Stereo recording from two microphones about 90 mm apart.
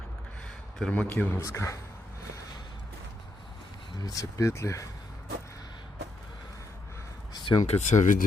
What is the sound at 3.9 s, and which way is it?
Speech, 45° left (ahead or behind).